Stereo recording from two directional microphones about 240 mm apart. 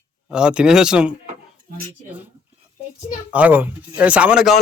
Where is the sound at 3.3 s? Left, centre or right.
Centre.